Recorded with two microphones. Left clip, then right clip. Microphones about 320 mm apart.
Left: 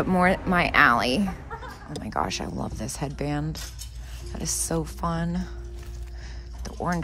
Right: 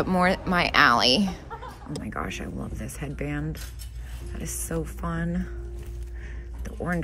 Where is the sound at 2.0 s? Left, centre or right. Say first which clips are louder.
Left 6 dB; centre.